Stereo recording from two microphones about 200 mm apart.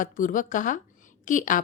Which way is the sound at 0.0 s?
40° left (ahead or behind).